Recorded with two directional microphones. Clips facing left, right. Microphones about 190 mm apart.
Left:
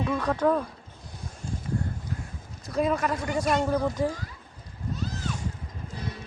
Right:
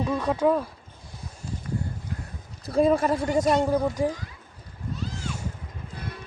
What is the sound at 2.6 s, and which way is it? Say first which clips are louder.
Speech: right 5 dB; 30° right (ahead or behind).